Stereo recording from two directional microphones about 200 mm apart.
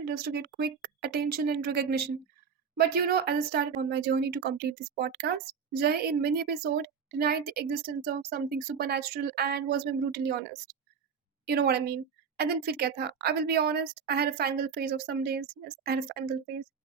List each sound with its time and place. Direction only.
0.0 s speech: 50° right (ahead or behind)
11.4 s speech: 50° right (ahead or behind)